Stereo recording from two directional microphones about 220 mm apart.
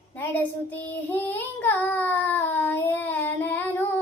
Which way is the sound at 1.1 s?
10° left (ahead or behind).